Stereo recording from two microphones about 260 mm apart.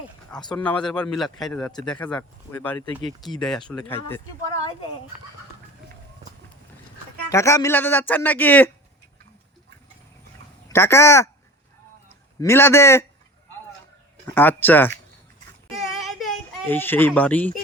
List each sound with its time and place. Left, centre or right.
0.5 s speech: centre
3.7 s speech: centre
7.3 s speech: centre
10.7 s speech: centre
12.4 s speech: centre
14.3 s speech: centre
15.8 s child singing: centre